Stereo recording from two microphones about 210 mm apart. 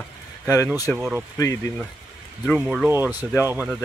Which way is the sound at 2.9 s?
10° right (ahead or behind).